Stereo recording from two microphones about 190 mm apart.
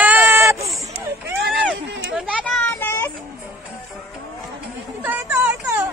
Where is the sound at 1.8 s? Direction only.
70° right (ahead or behind).